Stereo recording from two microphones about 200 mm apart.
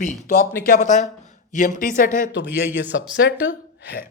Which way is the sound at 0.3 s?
40° left (ahead or behind).